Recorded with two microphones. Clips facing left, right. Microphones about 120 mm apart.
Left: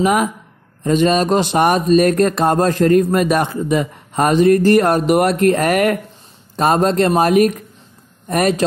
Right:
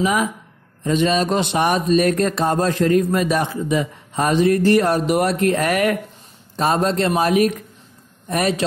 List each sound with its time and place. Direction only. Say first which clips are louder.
0.0 s speech: left 4 dB; 50° left (ahead or behind)